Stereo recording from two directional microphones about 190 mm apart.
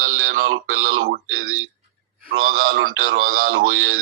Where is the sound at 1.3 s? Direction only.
90° right.